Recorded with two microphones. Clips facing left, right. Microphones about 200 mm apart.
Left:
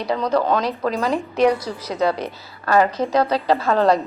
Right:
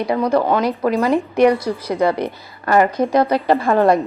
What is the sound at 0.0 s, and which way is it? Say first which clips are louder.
Speech: right 3 dB; 10° right (ahead or behind).